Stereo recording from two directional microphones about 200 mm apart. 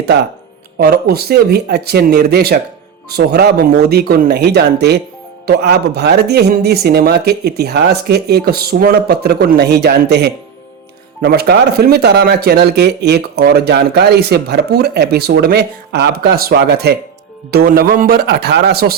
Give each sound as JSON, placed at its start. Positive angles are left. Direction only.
{"t": 0.8, "sound": "speech", "side_deg": -50}